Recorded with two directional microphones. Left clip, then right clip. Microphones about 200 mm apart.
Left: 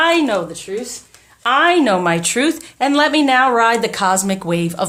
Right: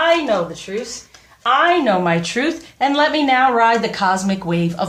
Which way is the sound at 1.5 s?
45° left (ahead or behind).